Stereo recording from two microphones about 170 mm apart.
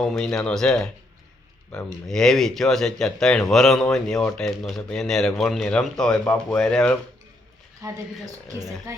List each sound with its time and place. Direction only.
0.0 s speech: 5° left (ahead or behind)
7.8 s speech: 20° right (ahead or behind)